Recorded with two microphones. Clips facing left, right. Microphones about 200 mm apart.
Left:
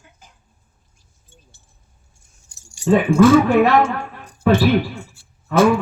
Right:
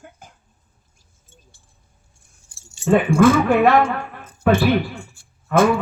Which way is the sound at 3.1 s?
55° right (ahead or behind).